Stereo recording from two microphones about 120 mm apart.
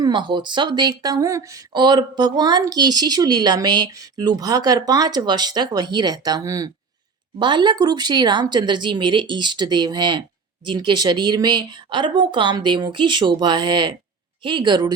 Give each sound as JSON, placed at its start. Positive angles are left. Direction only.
{"t": 0.0, "sound": "speech", "side_deg": -40}
{"t": 7.3, "sound": "speech", "side_deg": -40}